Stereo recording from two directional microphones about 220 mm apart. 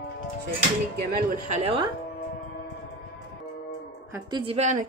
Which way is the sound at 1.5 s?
25° right (ahead or behind).